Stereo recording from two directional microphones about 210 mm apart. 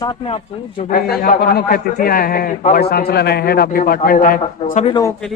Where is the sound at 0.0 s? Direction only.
20° left (ahead or behind).